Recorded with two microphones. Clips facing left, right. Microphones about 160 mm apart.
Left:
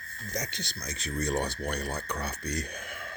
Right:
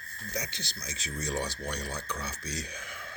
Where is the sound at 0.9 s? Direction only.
55° left (ahead or behind).